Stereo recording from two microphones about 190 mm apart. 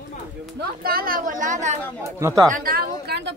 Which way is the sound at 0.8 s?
50° right (ahead or behind).